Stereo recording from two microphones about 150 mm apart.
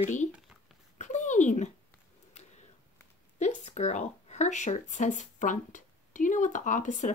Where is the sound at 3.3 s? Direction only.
50° left (ahead or behind).